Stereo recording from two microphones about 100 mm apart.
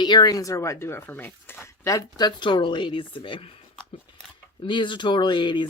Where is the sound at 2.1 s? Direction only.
50° left (ahead or behind); by 3.6 s 75° left (ahead or behind).